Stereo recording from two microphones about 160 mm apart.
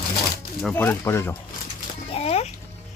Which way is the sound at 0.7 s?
15° left (ahead or behind).